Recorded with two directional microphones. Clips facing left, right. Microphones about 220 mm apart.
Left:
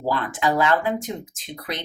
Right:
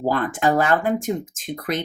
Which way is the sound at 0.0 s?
50° right (ahead or behind).